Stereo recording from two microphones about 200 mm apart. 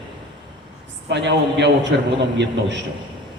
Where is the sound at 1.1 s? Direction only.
60° right (ahead or behind).